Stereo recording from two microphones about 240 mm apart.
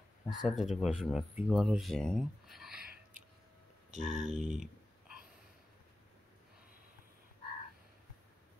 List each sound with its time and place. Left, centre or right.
0.3 s speech: centre
2.8 s whispering: right
3.9 s speech: right